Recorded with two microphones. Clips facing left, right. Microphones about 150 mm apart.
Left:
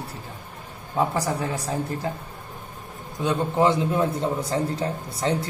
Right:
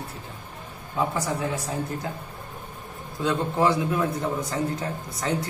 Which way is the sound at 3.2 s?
20° left (ahead or behind).